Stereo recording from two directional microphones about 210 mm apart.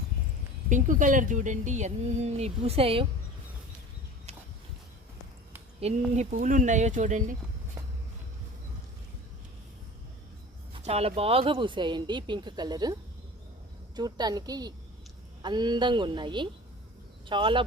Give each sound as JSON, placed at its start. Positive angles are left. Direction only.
{"t": 0.7, "sound": "speech", "side_deg": -40}
{"t": 5.8, "sound": "speech", "side_deg": -30}
{"t": 10.8, "sound": "speech", "side_deg": -30}